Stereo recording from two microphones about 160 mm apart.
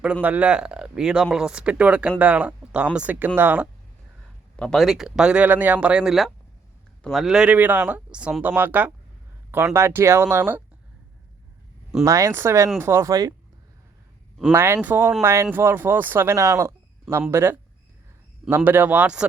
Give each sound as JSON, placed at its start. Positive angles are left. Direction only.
{"t": 0.0, "sound": "speech", "side_deg": -10}
{"t": 4.5, "sound": "speech", "side_deg": 5}
{"t": 12.0, "sound": "speech", "side_deg": -20}
{"t": 14.5, "sound": "speech", "side_deg": -15}